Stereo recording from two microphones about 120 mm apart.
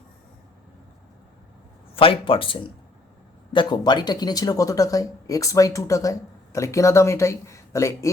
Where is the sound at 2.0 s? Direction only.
50° left (ahead or behind).